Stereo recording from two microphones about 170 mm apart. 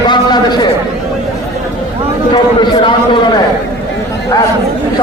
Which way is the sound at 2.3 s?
25° left (ahead or behind).